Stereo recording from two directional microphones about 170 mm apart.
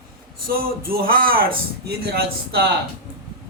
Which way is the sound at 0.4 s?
60° right (ahead or behind).